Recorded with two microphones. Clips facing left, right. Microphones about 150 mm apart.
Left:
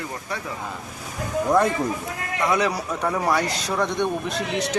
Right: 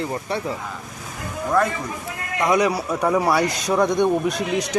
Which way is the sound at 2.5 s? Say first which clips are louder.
Right 5 dB; 15° right (ahead or behind).